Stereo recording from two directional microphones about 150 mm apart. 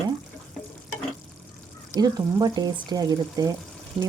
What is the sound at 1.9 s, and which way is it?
Speech, 25° right (ahead or behind).